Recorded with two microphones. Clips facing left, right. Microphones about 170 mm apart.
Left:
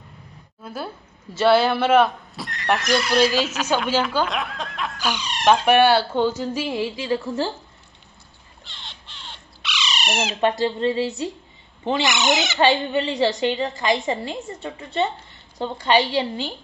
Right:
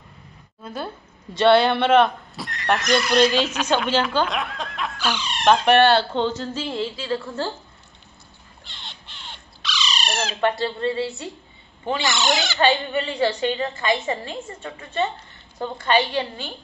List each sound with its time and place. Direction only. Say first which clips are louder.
0.6 s speech: right 1 dB; 5° left (ahead or behind)
5.0 s speech: even; 15° left (ahead or behind)
9.9 s speech: left 3 dB; 20° left (ahead or behind)